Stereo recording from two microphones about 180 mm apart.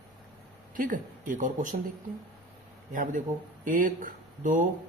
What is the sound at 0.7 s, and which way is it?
Speech, 50° right (ahead or behind).